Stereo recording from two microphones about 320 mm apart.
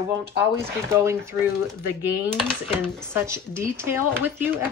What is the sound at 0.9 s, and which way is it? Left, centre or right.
Speech, centre.